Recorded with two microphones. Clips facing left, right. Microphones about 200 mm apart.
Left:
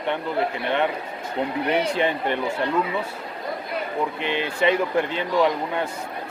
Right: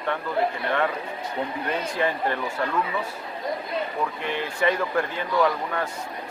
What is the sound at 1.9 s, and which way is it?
Speech, 25° left (ahead or behind).